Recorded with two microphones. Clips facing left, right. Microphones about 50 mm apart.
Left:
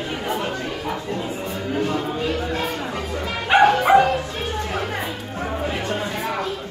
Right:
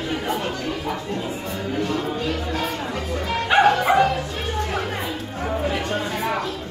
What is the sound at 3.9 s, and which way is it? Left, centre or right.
Bow-wow, centre.